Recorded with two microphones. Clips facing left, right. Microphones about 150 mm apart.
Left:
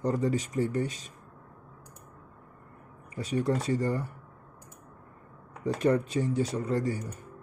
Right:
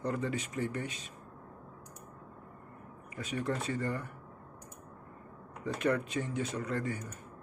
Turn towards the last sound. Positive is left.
turn(degrees=35)  # may be behind; listen again after turning